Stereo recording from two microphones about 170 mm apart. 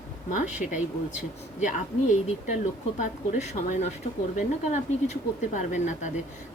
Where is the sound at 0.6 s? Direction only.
50° left (ahead or behind).